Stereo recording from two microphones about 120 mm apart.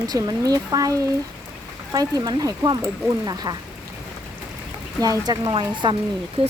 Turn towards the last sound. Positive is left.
turn(degrees=-55)  # may be behind; listen again after turning